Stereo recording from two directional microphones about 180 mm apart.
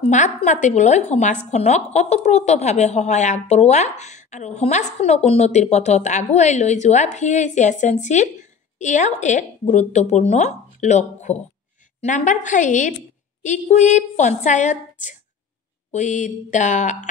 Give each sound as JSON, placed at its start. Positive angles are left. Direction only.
{"t": 0.0, "sound": "a woman's voice", "side_deg": 40}